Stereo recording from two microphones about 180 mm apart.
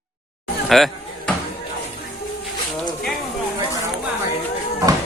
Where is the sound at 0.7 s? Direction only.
Centre (ahead or behind).